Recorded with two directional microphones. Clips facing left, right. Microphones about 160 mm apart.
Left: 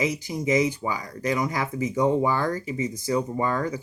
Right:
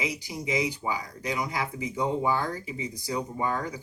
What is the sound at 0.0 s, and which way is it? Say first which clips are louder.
Speech: left 6 dB; 50° left (ahead or behind).